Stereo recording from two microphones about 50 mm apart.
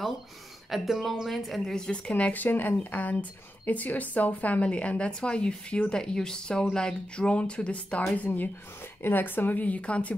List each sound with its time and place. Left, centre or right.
0.7 s speech: centre
1.8 s speech: left
8.1 s speech: left